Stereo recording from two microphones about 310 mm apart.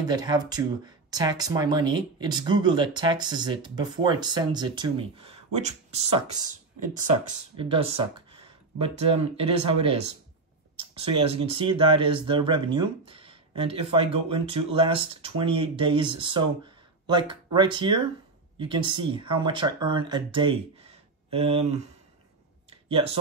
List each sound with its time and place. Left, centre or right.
0.0 s speech: centre
7.5 s speech: centre
22.7 s a sound: centre